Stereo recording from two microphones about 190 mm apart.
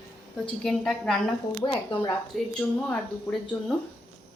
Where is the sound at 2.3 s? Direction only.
Centre (ahead or behind).